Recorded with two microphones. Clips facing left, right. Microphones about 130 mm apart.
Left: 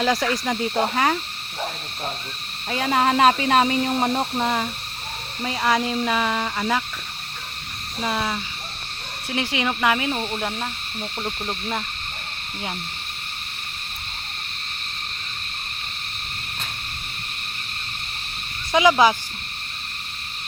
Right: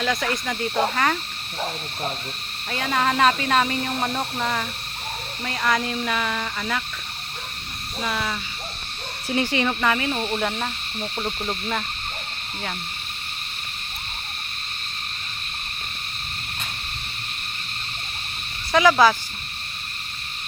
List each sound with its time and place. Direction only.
0.5 s speech: 15° left (ahead or behind)
0.8 s speech: 25° left (ahead or behind)
2.6 s speech: 25° left (ahead or behind)
8.0 s speech: 25° left (ahead or behind)
9.3 s speech: 5° left (ahead or behind)
18.7 s speech: 15° left (ahead or behind)